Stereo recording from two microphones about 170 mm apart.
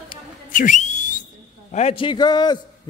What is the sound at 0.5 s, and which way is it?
Whistle, 50° left (ahead or behind).